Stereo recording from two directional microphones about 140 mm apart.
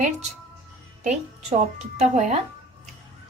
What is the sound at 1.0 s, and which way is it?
Speech, 55° right (ahead or behind).